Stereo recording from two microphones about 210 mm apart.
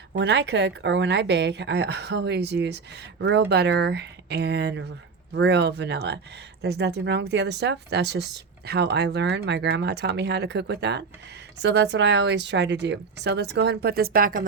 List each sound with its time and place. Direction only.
0.1 s a woman's voice: 55° right (ahead or behind)